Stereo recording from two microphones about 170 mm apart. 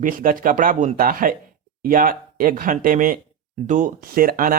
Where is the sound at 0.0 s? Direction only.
55° right (ahead or behind).